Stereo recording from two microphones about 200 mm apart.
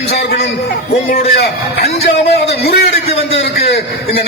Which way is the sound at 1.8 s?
30° left (ahead or behind).